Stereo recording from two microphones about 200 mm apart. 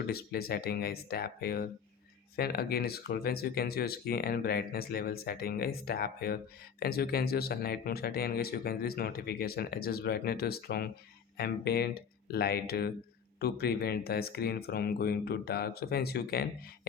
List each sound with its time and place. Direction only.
0.1 s speech: 50° left (ahead or behind)